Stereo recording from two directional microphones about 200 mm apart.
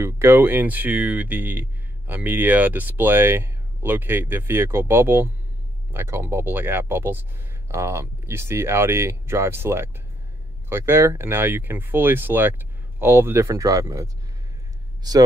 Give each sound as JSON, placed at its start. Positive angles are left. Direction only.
{"t": 0.0, "sound": "speech", "side_deg": -10}